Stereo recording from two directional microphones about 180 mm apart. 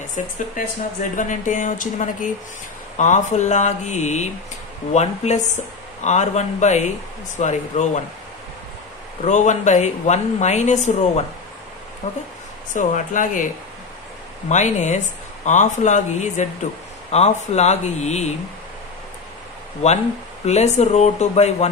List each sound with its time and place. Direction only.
0.2 s speech: 45° left (ahead or behind)
9.2 s speech: 40° left (ahead or behind)
14.5 s speech: 40° left (ahead or behind)
19.8 s speech: 40° left (ahead or behind)